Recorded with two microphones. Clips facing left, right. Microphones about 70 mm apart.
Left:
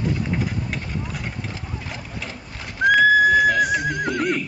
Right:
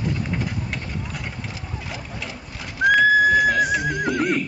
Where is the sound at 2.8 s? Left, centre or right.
Centre.